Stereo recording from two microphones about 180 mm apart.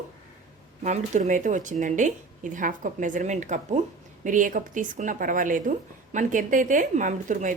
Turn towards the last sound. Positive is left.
turn(degrees=-45)  # may be behind; listen again after turning